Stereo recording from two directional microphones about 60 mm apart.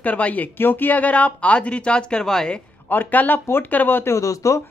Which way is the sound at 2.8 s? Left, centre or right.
Left.